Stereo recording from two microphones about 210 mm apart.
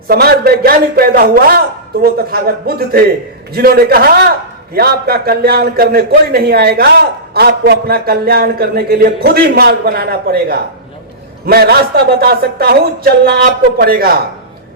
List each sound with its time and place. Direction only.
0.1 s a man's voice: 50° right (ahead or behind)